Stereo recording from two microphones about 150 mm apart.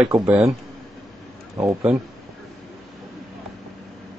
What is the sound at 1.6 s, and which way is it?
Speech, 15° right (ahead or behind).